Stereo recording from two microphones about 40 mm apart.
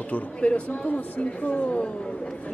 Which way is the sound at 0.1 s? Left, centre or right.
Left.